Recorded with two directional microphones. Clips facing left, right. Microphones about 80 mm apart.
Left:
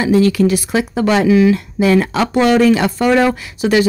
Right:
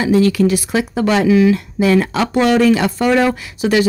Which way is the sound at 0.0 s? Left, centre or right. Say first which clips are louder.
Left 1 dB; left.